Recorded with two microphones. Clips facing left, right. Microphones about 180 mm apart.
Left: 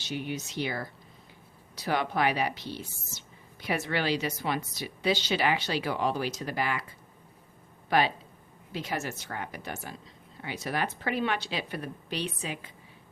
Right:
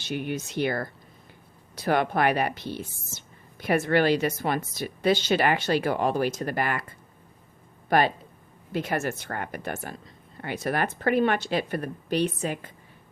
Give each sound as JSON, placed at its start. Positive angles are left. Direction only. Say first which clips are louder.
{"t": 0.0, "sound": "speech", "louder": "right 4 dB", "side_deg": -55}